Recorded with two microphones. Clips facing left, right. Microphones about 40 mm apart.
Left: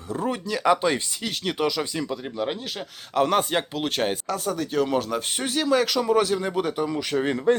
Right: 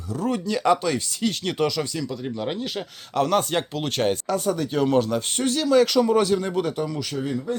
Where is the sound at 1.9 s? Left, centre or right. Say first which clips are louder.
Even; left.